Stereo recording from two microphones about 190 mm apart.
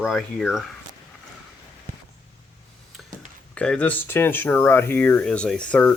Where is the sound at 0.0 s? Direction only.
Centre (ahead or behind).